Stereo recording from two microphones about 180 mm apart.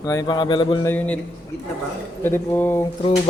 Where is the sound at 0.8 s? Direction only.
10° left (ahead or behind).